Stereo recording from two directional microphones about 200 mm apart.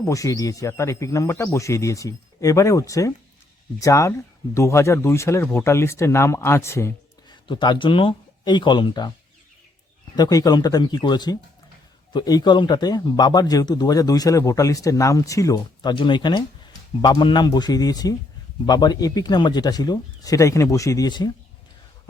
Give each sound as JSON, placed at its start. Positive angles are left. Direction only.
{"t": 0.0, "sound": "speech", "side_deg": 15}
{"t": 10.2, "sound": "speech", "side_deg": 20}